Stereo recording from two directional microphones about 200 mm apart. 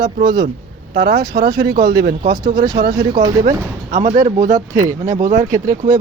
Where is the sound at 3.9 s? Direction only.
35° right (ahead or behind).